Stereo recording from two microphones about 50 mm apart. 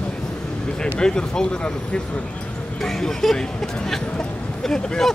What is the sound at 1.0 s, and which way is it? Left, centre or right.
Speech, centre.